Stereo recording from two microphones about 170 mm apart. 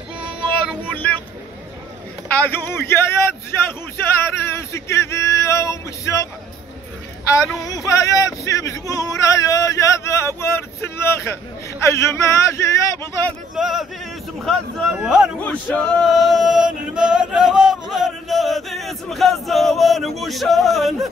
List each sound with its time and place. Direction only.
0.8 s vehicle: 10° left (ahead or behind)
2.3 s a man's voice: 10° left (ahead or behind)
7.6 s a man's voice: 20° left (ahead or behind)
13.6 s speech: 5° right (ahead or behind)
15.4 s male singing: 10° left (ahead or behind)